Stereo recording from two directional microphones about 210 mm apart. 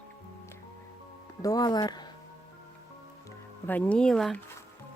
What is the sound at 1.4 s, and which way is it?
Speech, 20° left (ahead or behind).